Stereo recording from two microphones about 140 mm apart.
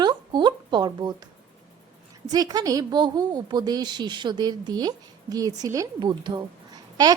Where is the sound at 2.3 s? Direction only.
30° right (ahead or behind).